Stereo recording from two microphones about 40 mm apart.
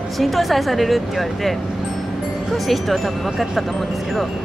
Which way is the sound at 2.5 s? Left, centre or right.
Centre.